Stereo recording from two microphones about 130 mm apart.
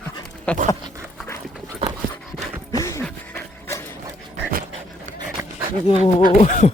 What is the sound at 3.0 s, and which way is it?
Dog, 10° left (ahead or behind).